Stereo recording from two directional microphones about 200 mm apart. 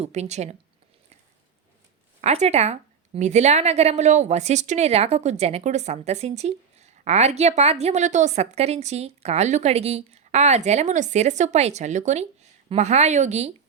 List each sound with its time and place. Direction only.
0.0 s a woman's voice: 35° right (ahead or behind)
2.2 s a woman's voice: 35° right (ahead or behind)